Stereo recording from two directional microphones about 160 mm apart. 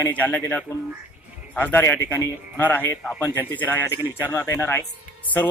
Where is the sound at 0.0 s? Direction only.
10° left (ahead or behind).